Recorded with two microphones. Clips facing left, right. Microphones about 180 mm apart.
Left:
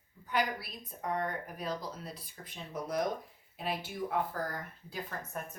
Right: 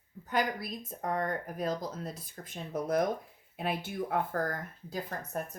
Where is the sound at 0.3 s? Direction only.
45° right (ahead or behind).